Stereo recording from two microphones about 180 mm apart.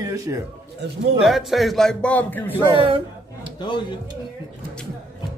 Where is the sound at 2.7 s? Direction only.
30° right (ahead or behind).